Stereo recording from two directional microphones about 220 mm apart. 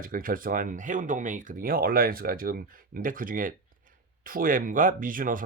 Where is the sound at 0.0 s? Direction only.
40° right (ahead or behind).